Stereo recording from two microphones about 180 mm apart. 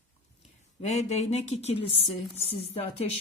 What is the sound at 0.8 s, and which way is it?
A woman's voice, 40° left (ahead or behind).